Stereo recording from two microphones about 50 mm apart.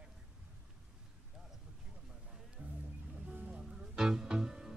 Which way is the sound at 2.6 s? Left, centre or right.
Right.